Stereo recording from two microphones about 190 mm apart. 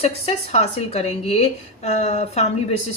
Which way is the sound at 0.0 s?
35° left (ahead or behind).